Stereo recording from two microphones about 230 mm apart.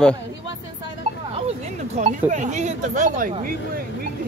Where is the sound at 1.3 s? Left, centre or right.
Right.